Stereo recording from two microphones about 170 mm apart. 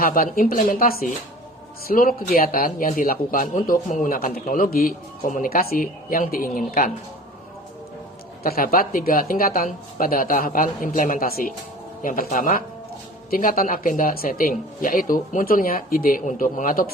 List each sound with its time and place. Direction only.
0.0 s a man's voice: 55° left (ahead or behind)
8.4 s a man's voice: 60° left (ahead or behind)